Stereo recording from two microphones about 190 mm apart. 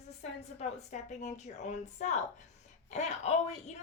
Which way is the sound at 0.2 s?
35° left (ahead or behind).